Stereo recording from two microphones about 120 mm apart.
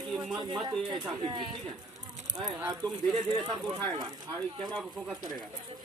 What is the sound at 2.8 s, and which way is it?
Speech, centre (ahead or behind).